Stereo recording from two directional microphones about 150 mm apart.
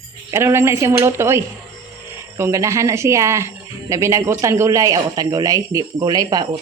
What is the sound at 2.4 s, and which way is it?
Speech, 20° right (ahead or behind).